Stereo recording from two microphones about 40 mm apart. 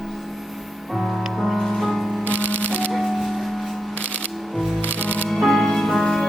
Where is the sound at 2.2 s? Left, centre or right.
Left.